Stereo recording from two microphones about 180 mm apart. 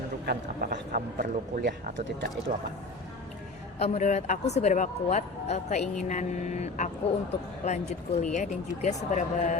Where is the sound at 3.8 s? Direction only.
40° left (ahead or behind).